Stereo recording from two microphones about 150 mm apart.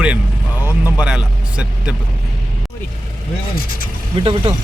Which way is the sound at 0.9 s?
5° right (ahead or behind).